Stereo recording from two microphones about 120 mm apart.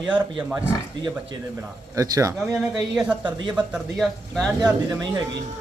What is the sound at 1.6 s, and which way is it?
Speech, 30° right (ahead or behind).